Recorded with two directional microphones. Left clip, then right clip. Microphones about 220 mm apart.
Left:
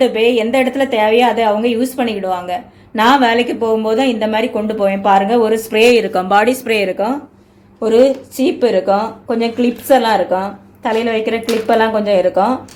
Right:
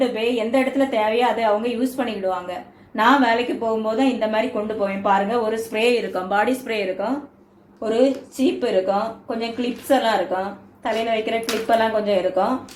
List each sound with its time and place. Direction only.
0.0 s a woman's voice: 45° left (ahead or behind)
8.4 s a woman's voice: 50° left (ahead or behind)